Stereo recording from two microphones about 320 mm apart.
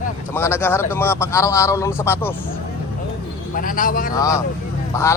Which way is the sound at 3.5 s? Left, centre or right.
Left.